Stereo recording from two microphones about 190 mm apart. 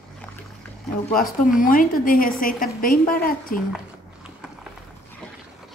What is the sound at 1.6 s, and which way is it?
A woman's voice, 45° left (ahead or behind).